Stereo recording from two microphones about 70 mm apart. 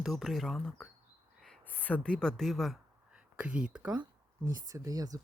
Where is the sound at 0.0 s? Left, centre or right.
Centre.